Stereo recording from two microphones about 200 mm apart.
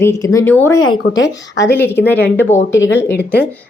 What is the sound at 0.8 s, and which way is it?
Speech, 80° left.